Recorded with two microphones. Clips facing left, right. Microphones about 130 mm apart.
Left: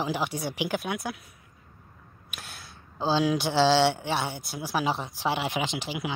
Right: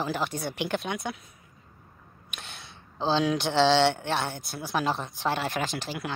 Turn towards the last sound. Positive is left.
turn(degrees=10)  # may be behind; listen again after turning